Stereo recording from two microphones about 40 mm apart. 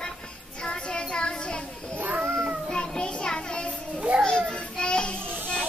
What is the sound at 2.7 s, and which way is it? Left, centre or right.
Child singing, centre.